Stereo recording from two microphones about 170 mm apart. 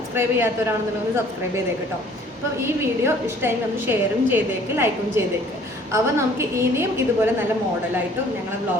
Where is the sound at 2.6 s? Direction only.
15° right (ahead or behind).